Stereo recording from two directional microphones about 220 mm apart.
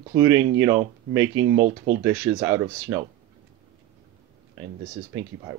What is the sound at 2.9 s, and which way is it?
Speech, 10° right (ahead or behind).